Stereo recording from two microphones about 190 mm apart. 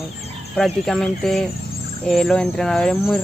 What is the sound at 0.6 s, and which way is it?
Speech, centre (ahead or behind).